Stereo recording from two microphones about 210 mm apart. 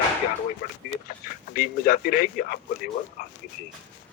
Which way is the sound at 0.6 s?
45° left (ahead or behind).